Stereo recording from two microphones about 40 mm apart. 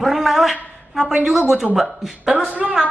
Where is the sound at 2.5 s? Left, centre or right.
Right.